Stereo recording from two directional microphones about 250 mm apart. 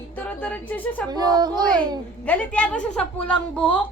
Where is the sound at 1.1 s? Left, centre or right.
Centre.